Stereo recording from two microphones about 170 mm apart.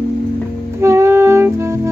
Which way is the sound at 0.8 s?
15° right (ahead or behind).